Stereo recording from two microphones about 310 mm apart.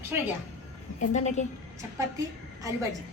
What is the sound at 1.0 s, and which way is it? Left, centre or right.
Speech, left.